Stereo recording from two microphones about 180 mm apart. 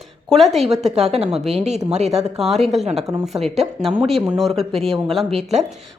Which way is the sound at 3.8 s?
Centre (ahead or behind).